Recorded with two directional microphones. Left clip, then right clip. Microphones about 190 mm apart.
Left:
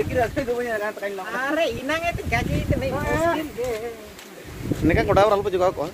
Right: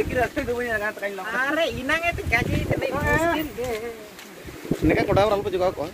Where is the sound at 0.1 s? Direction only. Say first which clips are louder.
Left 1 dB; 10° left (ahead or behind).